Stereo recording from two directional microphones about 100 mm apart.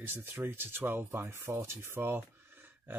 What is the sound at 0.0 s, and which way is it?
Speech, 20° right (ahead or behind).